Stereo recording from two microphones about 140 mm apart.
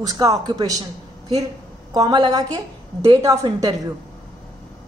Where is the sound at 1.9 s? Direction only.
30° right (ahead or behind).